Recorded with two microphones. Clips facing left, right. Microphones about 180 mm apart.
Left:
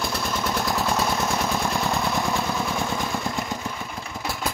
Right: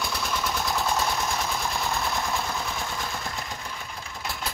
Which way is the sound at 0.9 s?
60° left (ahead or behind).